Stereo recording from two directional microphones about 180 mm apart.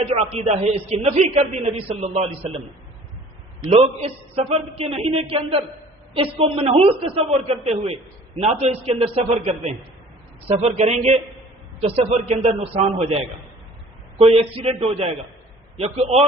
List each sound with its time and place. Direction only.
0.1 s a man's voice: 35° right (ahead or behind)
3.6 s a man's voice: 35° right (ahead or behind)
14.2 s a man's voice: 35° right (ahead or behind)